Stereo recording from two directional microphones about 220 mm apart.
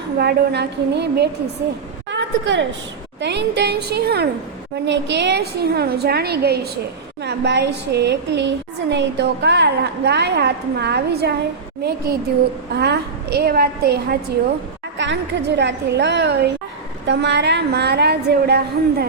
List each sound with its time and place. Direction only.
0.2 s a woman's voice: 50° right (ahead or behind)
2.0 s a sound: 55° right (ahead or behind)
3.2 s a woman's voice: 50° right (ahead or behind)